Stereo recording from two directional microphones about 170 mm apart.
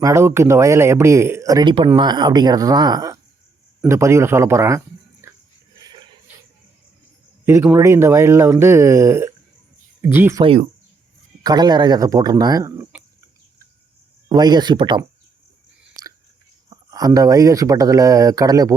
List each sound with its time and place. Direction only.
0.0 s speech: 15° right (ahead or behind)
5.2 s music: 15° right (ahead or behind)
5.8 s a sound: 25° right (ahead or behind)
7.4 s speech: 15° right (ahead or behind)
10.4 s speech: 35° right (ahead or behind)
11.4 s speech: 25° right (ahead or behind)
14.3 s speech: 25° right (ahead or behind)
16.6 s speech: 20° right (ahead or behind)